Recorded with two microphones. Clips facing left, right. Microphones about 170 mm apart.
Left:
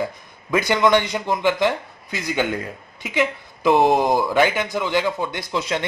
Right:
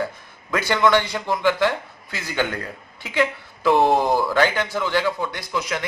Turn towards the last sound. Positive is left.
turn(degrees=25)  # may be behind; listen again after turning